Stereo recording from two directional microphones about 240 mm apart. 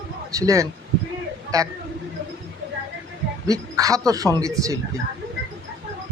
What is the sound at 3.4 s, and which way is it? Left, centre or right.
Speech, centre.